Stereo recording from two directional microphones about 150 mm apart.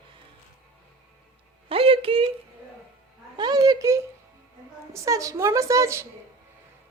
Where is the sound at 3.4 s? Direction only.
25° right (ahead or behind).